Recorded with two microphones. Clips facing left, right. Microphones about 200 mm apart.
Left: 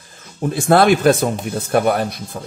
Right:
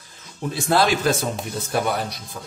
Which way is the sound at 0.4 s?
50° left (ahead or behind).